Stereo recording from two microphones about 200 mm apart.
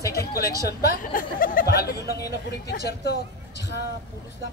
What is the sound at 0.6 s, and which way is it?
Speech, 45° left (ahead or behind).